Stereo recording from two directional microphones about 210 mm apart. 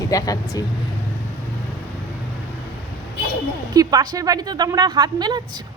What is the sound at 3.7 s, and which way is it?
A woman's voice, 20° right (ahead or behind).